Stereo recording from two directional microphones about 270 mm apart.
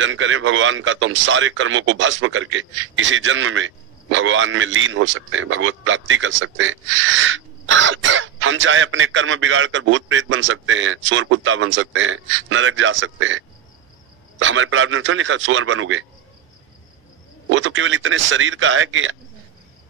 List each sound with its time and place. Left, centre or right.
0.0 s a man's voice: right
14.4 s a man's voice: right
17.5 s a man's voice: right